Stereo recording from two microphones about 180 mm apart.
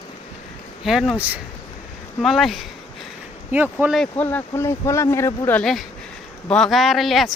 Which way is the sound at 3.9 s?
5° left (ahead or behind).